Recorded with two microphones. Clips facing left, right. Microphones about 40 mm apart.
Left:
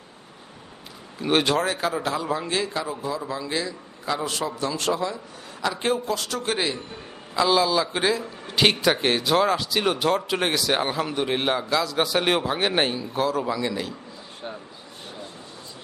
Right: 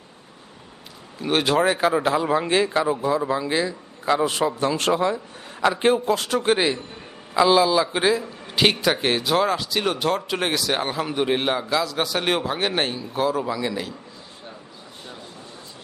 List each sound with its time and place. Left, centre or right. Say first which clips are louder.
1.2 s a man's voice: even; centre
1.5 s a man's voice: right 5 dB; right
5.6 s a man's voice: right 5 dB; right
7.3 s a man's voice: right 3 dB; centre